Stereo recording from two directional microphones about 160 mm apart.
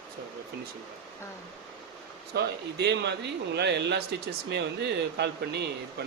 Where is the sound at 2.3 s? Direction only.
90° right.